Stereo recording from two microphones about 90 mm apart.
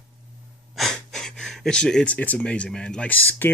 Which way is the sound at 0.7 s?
5° left (ahead or behind).